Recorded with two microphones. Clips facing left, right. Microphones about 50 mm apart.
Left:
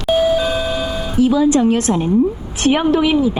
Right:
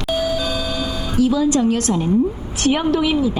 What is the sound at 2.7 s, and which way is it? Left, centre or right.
Speech, centre.